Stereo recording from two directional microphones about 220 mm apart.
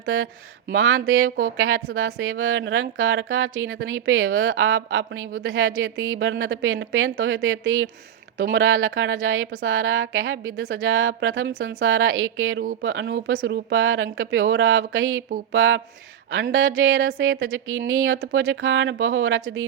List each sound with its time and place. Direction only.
0.0 s a woman's voice: 65° right (ahead or behind)